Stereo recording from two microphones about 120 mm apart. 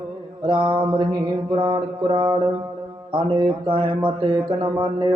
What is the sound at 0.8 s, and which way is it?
A man's voice, 40° right (ahead or behind).